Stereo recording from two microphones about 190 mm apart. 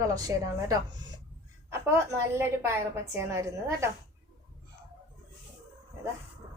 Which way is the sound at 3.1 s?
15° right (ahead or behind).